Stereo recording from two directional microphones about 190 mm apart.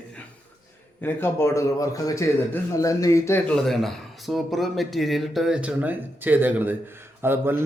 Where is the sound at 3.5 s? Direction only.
Centre (ahead or behind).